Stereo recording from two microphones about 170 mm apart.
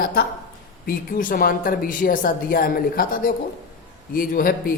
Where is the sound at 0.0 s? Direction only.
65° left (ahead or behind).